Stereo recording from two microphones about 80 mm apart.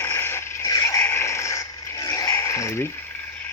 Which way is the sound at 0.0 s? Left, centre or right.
Left.